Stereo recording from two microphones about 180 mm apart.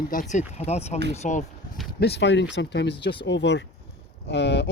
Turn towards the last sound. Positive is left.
turn(degrees=75)  # may be behind; listen again after turning